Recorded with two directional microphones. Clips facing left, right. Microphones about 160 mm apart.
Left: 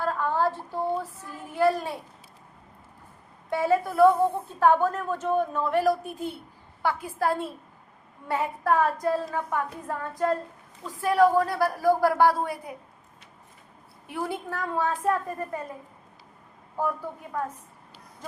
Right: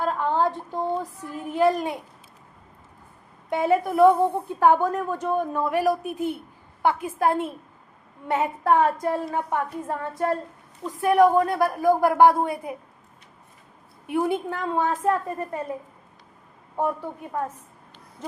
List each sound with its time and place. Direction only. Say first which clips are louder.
0.0 s a sound: right 2 dB; 20° right (ahead or behind)
3.5 s a woman's voice: right 2 dB; 20° right (ahead or behind)
14.1 s a woman's voice: right 7 dB; 20° right (ahead or behind)
17.3 s a woman's voice: right 2 dB; 30° right (ahead or behind)